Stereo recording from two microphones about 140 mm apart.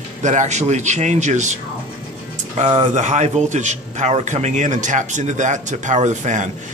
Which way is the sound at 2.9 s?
55° right (ahead or behind).